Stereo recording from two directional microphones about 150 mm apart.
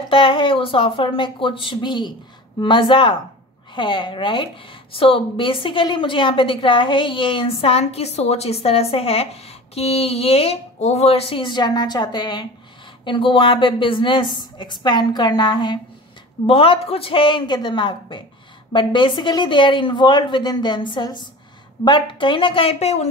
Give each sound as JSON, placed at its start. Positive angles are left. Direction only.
{"t": 0.1, "sound": "a woman's voice", "side_deg": 35}